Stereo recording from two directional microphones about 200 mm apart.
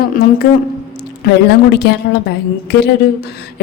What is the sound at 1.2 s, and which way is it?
A woman's voice, 55° left (ahead or behind).